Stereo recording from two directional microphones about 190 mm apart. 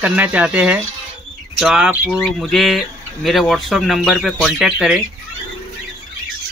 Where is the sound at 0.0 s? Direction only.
5° right (ahead or behind).